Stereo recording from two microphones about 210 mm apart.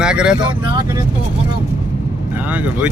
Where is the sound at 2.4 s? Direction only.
5° right (ahead or behind).